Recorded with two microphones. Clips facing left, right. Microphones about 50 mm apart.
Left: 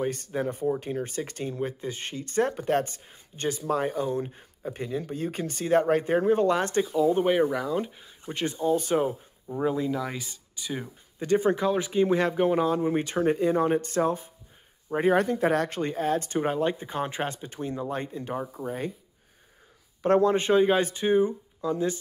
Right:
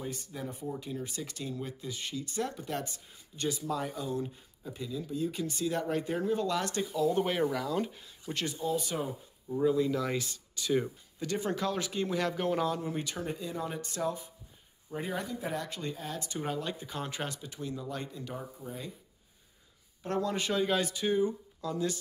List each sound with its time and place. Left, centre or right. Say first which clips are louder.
0.0 s speech: left 11 dB; left
8.5 s speech: left 9 dB; left
9.8 s speech: left 1 dB; centre
11.1 s speech: left 9 dB; left
18.6 s speech: left 10 dB; left
20.1 s speech: left 11 dB; left